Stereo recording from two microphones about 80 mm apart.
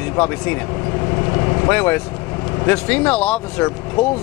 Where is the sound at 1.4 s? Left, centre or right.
Left.